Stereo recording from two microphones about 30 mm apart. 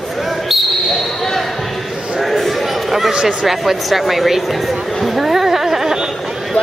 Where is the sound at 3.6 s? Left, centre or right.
Centre.